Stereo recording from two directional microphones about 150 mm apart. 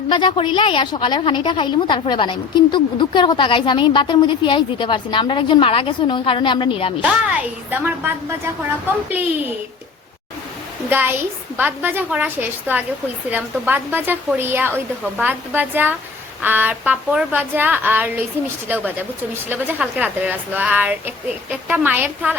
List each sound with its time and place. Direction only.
0.1 s a woman's voice: 35° left (ahead or behind)
7.0 s a woman's voice: 10° right (ahead or behind)
10.8 s a woman's voice: 15° right (ahead or behind)